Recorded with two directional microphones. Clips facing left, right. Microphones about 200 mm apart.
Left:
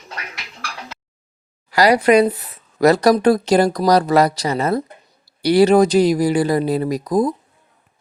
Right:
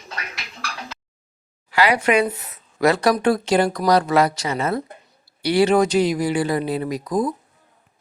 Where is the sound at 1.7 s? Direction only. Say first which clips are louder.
Left 5 dB; 40° left (ahead or behind).